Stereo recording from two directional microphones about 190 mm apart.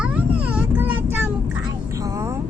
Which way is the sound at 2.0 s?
15° right (ahead or behind).